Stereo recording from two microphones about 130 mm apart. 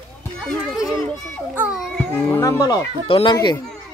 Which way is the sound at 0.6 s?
5° right (ahead or behind).